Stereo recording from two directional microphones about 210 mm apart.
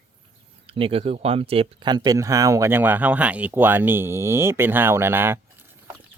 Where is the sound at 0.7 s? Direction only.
25° right (ahead or behind); by 5.4 s 10° right (ahead or behind).